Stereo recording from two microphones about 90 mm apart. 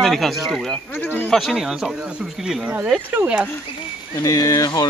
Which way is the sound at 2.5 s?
15° right (ahead or behind).